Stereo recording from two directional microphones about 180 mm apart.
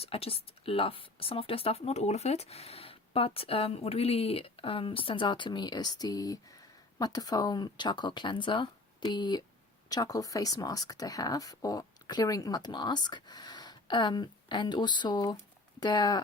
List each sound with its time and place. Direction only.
0.0 s speech: 30° left (ahead or behind)